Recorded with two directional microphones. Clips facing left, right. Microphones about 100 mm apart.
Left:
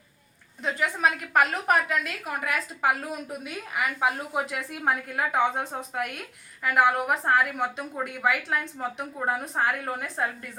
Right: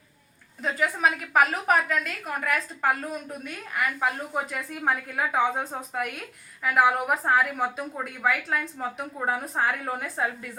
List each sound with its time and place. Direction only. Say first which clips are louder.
0.6 s a woman's voice: right 1 dB; centre (ahead or behind)